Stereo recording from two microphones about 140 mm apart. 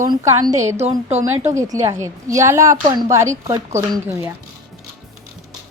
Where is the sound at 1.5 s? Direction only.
20° right (ahead or behind).